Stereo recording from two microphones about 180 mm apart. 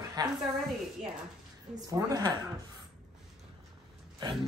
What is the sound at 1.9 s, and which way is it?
Speech, 20° right (ahead or behind).